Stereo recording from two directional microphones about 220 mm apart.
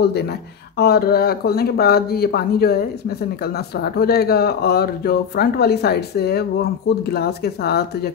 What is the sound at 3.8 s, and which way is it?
Speech, 45° left (ahead or behind).